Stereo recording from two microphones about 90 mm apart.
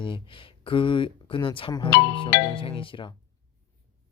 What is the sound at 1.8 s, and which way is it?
Speech, 65° left (ahead or behind).